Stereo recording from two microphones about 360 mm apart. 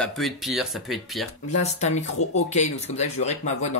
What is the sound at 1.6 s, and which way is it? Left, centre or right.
Speech, centre.